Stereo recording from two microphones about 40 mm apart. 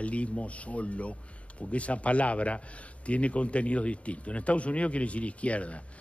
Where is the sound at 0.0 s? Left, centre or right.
Left.